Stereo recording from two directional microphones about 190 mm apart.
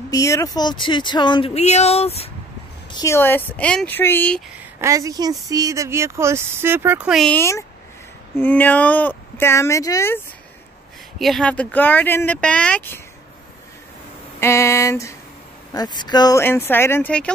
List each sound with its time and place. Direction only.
0.1 s speech: 15° left (ahead or behind); by 2.3 s 30° left (ahead or behind)
2.9 s speech: 15° left (ahead or behind)
4.7 s speech: 15° right (ahead or behind)
7.3 s speech: 15° left (ahead or behind)
11.1 s speech: centre (ahead or behind)
14.4 s speech: 15° left (ahead or behind)